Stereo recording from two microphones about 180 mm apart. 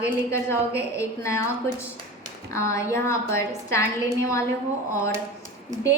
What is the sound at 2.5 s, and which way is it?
A woman's voice, 15° left (ahead or behind).